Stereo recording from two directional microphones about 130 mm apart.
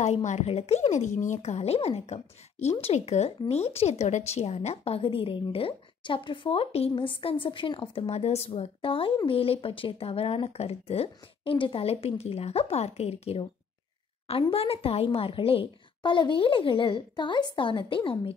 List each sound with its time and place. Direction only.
0.0 s speech: 60° left (ahead or behind); by 18.3 s 40° left (ahead or behind)